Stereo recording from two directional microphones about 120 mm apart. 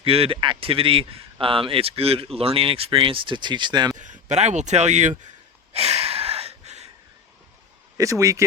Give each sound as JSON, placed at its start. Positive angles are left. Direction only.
{"t": 0.0, "sound": "speech", "side_deg": -50}
{"t": 3.9, "sound": "speech", "side_deg": -90}
{"t": 5.7, "sound": "a sound", "side_deg": -60}
{"t": 7.9, "sound": "speech", "side_deg": -25}